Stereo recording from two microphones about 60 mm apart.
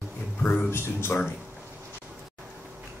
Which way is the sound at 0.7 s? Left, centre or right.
Left.